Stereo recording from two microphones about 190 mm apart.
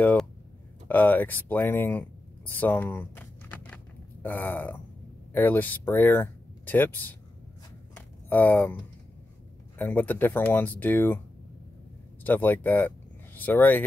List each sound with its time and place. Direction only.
0.0 s speech: 10° left (ahead or behind)
8.3 s speech: 10° left (ahead or behind)
9.8 s speech: 10° left (ahead or behind)
12.2 s speech: 10° left (ahead or behind)